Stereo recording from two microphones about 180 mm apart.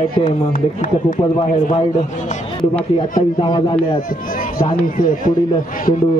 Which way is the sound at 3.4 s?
30° left (ahead or behind).